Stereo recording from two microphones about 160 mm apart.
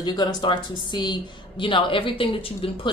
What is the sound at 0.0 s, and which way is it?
Speech, 25° left (ahead or behind).